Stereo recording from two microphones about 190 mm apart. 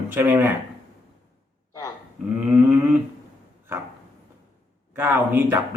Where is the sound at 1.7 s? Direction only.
20° left (ahead or behind).